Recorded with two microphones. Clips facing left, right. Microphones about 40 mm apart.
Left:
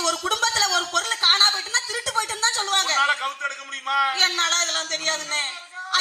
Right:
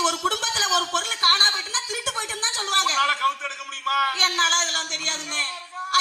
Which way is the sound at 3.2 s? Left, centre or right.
Right.